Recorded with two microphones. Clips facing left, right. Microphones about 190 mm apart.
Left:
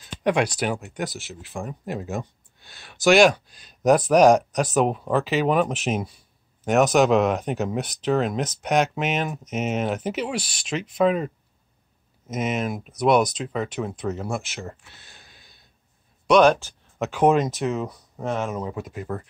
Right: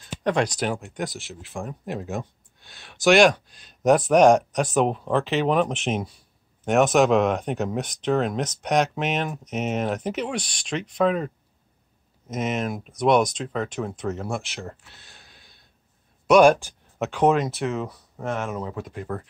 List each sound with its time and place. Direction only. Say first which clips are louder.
0.2 s speech: left 1 dB; 5° left (ahead or behind)
16.3 s speech: right 1 dB; 10° right (ahead or behind)
17.0 s speech: left 1 dB; 5° left (ahead or behind)
18.8 s speech: left 1 dB; 5° left (ahead or behind)